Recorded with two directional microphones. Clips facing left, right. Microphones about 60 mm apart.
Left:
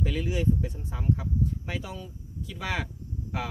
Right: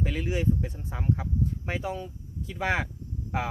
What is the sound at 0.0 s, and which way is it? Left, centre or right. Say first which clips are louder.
Speech: even; right.